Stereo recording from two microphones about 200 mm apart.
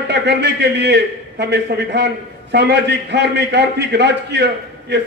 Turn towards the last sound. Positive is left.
turn(degrees=-55)  # may be behind; listen again after turning